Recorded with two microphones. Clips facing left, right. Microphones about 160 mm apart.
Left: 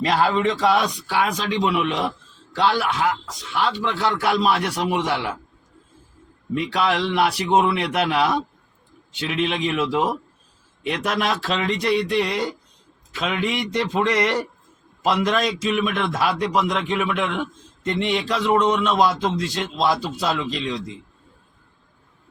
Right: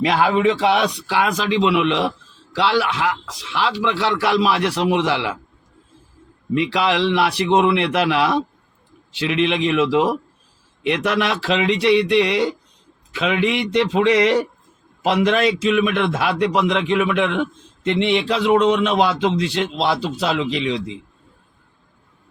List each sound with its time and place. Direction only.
0.1 s a man's voice: 60° right (ahead or behind)
0.4 s a man's voice: 70° right (ahead or behind)
6.5 s a man's voice: 70° right (ahead or behind)